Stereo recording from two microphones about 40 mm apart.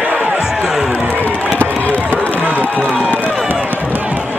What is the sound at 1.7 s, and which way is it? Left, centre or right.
Run, left.